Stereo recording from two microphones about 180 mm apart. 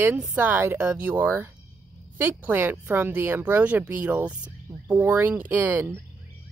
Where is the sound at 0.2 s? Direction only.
10° right (ahead or behind).